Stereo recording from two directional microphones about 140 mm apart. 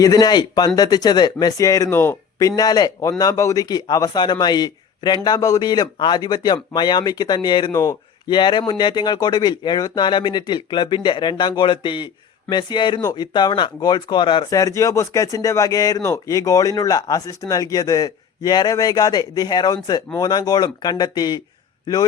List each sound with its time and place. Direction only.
0.0 s speech: 25° left (ahead or behind)
2.6 s a man's voice: 30° left (ahead or behind)
14.5 s speech: 20° left (ahead or behind)